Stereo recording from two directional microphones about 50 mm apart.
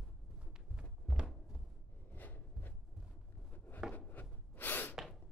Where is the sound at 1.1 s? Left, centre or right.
Centre.